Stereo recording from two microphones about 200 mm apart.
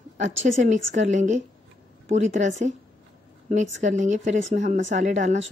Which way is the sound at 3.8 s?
35° right (ahead or behind).